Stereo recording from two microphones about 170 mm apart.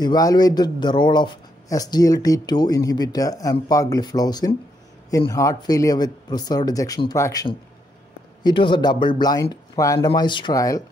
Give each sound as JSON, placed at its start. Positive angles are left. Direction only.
{"t": 0.0, "sound": "speech", "side_deg": 20}